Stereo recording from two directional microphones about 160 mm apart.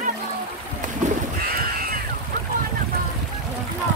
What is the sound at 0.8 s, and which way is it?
Music, 60° right (ahead or behind).